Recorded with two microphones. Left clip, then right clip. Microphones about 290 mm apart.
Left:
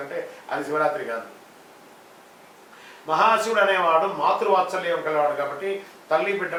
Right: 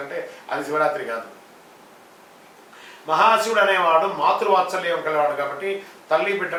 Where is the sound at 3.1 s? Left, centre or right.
Centre.